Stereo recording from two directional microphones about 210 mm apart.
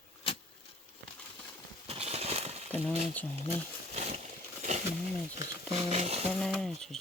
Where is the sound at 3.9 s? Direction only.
30° right (ahead or behind).